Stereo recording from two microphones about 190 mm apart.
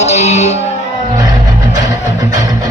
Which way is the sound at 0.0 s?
35° left (ahead or behind).